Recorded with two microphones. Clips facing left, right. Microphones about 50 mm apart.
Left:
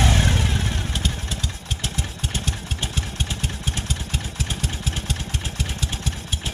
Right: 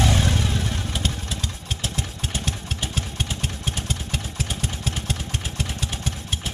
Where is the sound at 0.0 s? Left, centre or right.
Left.